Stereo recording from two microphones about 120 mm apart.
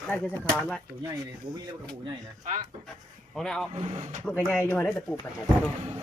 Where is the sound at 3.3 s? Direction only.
5° left (ahead or behind).